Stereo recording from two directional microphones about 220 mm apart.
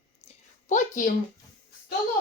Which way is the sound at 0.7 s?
35° left (ahead or behind).